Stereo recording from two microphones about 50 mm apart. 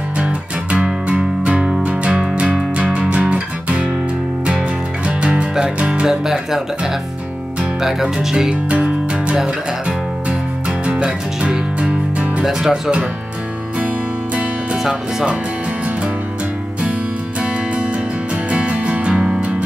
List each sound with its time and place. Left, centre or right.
0.2 s music: right
5.0 s music: right
6.0 s speech: centre
8.6 s music: right
10.9 s music: right
12.4 s speech: centre
13.7 s music: right
14.8 s speech: centre
18.5 s music: right